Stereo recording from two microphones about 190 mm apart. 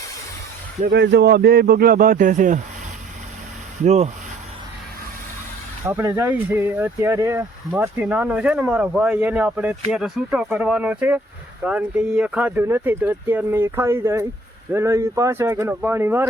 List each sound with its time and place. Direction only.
0.9 s speech: 65° right (ahead or behind); by 2.6 s 40° right (ahead or behind)
3.8 s speech: 35° right (ahead or behind)
5.8 s speech: 10° right (ahead or behind)